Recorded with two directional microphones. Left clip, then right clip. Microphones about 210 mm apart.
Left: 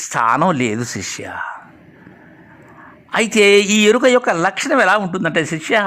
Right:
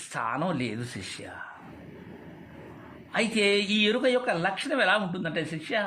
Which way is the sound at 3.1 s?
35° left (ahead or behind).